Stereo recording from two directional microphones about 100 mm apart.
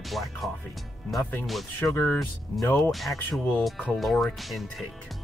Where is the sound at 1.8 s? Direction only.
20° left (ahead or behind).